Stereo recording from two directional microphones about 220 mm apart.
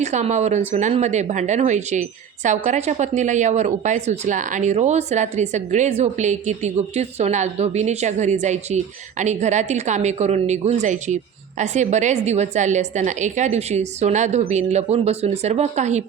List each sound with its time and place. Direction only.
0.0 s speech: 30° right (ahead or behind)